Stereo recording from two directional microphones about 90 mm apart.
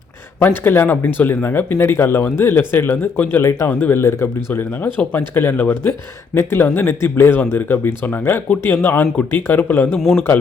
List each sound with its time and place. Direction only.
0.4 s speech: 25° left (ahead or behind)
9.9 s a man's voice: centre (ahead or behind)